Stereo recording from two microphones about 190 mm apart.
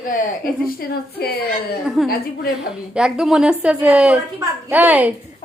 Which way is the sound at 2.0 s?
Centre (ahead or behind).